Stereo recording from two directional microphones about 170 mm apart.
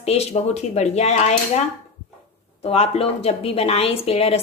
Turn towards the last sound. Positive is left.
turn(degrees=35)  # may be behind; listen again after turning